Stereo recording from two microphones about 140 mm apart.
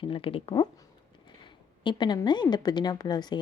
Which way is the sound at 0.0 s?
40° left (ahead or behind).